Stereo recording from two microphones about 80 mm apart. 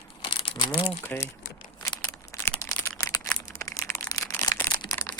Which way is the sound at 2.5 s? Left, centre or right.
Left.